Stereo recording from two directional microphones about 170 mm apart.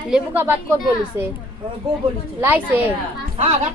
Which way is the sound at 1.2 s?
15° right (ahead or behind).